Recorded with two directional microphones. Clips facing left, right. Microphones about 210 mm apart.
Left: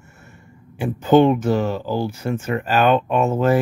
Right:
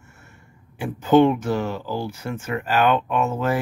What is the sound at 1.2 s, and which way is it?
Speech, 30° left (ahead or behind).